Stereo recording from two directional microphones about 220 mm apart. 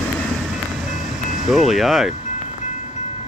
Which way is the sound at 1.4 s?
Centre (ahead or behind).